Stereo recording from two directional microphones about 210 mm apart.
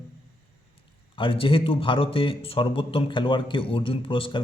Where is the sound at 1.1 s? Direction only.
25° left (ahead or behind).